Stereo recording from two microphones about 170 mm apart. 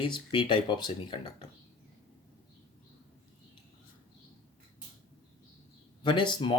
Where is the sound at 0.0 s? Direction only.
30° left (ahead or behind).